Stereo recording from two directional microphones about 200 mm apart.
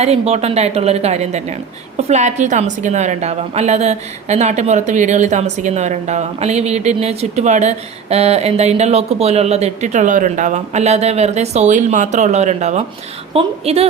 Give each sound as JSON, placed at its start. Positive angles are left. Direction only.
{"t": 0.0, "sound": "a woman's voice", "side_deg": -30}